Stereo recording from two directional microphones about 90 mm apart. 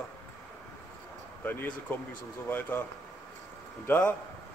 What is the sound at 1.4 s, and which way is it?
Speech, 20° left (ahead or behind).